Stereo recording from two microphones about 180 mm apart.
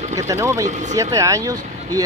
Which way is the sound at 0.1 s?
15° right (ahead or behind).